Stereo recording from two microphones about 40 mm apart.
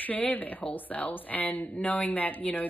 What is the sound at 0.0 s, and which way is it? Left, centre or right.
A woman's voice, left.